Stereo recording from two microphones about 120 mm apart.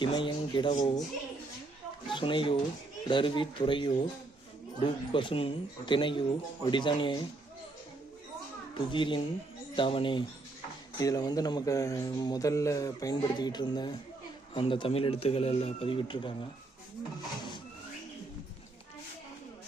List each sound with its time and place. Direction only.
0.0 s speech: 45° left (ahead or behind)
2.0 s speech: 45° left (ahead or behind)
8.7 s speech: 45° left (ahead or behind)
10.9 s speech: 30° left (ahead or behind)